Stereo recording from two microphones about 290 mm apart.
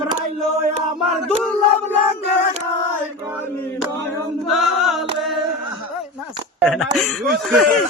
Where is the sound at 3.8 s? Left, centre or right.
Centre.